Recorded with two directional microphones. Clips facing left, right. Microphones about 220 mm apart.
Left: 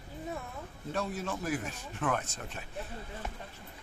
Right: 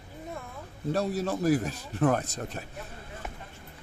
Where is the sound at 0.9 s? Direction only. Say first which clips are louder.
Right 6 dB; 40° right (ahead or behind).